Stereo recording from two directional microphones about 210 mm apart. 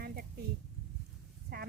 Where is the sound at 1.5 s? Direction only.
45° right (ahead or behind).